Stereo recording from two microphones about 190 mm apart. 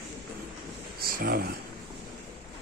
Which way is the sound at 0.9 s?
50° right (ahead or behind).